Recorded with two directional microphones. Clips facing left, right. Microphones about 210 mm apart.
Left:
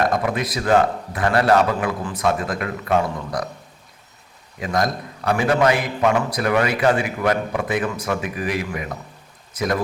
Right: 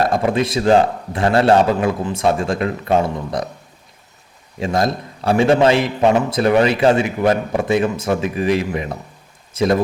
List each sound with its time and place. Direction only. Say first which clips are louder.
0.0 s a man's voice: right 4 dB; 30° right (ahead or behind)
4.6 s a man's voice: right 3 dB; 25° right (ahead or behind)